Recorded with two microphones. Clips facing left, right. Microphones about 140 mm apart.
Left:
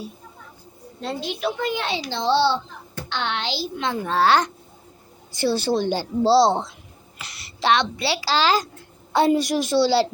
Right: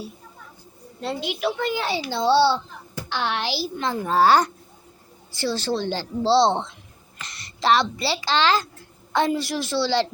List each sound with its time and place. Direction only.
1.4 s a child's voice: centre (ahead or behind)
5.3 s a woman's voice: 15° left (ahead or behind)